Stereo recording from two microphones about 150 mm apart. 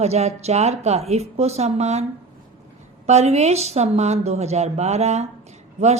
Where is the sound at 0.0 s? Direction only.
45° right (ahead or behind).